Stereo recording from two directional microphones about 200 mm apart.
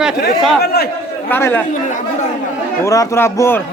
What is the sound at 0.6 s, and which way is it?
Speech, 50° left (ahead or behind).